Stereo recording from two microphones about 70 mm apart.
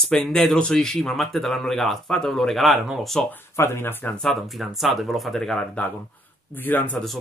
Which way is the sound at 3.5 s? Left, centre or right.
Left.